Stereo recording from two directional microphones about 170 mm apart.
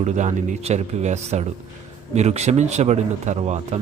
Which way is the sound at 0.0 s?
40° right (ahead or behind).